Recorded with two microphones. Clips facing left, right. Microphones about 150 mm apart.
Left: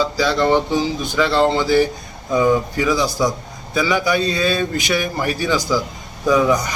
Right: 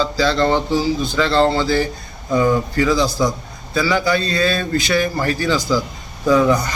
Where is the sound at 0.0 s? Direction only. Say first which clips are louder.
Right 1 dB; 15° left (ahead or behind).